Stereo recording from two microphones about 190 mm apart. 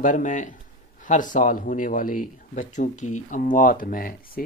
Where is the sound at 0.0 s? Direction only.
40° left (ahead or behind).